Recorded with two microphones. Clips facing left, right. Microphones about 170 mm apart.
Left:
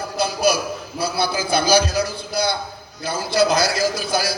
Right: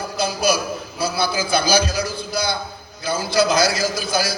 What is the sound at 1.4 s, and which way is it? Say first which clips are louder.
A man's voice: left 2 dB; 60° left (ahead or behind).